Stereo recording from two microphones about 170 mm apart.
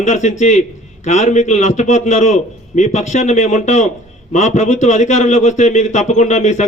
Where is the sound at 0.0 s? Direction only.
45° left (ahead or behind).